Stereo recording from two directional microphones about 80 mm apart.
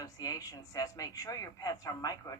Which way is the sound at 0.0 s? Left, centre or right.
Left.